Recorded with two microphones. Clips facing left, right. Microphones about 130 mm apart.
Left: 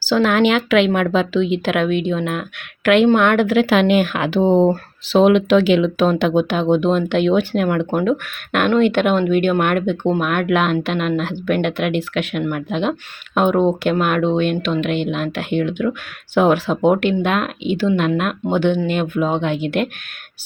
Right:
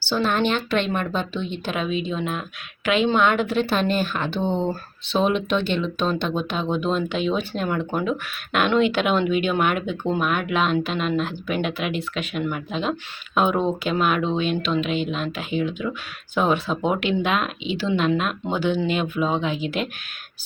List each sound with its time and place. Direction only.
0.1 s a woman's voice: 90° left; by 7.9 s 65° left (ahead or behind)
8.5 s speech: 55° left (ahead or behind)